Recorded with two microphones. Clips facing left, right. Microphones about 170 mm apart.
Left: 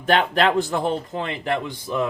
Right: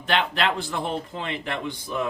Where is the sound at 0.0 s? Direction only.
45° left (ahead or behind).